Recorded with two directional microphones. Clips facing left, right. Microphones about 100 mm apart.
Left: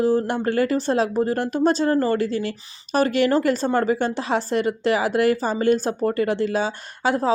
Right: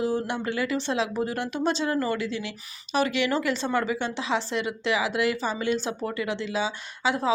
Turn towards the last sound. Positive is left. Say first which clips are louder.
# left 4 dB
turn(degrees=45)  # may be behind; listen again after turning